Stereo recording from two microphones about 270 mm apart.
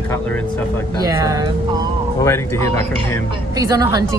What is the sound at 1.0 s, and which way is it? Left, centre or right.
Speech, centre.